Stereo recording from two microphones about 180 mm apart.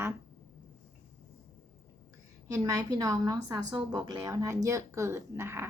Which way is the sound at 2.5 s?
20° right (ahead or behind).